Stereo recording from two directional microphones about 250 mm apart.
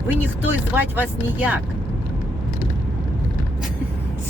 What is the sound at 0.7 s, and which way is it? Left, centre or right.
Speech, centre.